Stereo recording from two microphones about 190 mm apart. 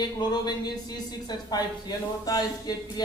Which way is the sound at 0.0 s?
20° left (ahead or behind).